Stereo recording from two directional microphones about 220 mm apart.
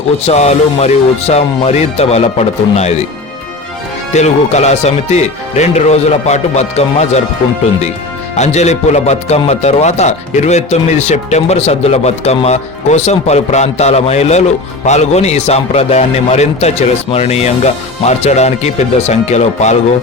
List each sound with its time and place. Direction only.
0.3 s speech: 30° left (ahead or behind)
4.1 s speech: 30° left (ahead or behind)
8.4 s speech: 30° left (ahead or behind)